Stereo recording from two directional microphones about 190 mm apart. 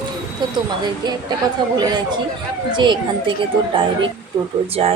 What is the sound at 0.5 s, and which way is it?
Speech, 20° right (ahead or behind).